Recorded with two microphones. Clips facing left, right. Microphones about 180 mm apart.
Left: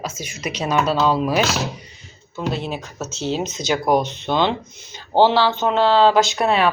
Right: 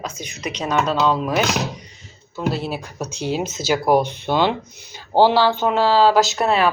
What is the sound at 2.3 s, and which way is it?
Speech, 5° right (ahead or behind).